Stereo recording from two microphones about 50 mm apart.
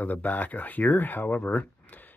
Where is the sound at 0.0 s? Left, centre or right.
Left.